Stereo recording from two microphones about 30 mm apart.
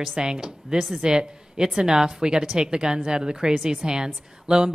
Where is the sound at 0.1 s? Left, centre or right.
Right.